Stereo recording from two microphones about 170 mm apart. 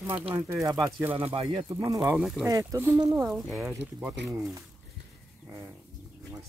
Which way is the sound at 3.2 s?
Centre (ahead or behind).